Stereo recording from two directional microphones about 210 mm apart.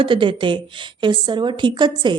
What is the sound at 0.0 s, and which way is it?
A woman's voice, 25° right (ahead or behind).